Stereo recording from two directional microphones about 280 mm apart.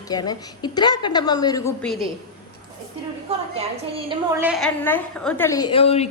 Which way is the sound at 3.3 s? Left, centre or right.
Right.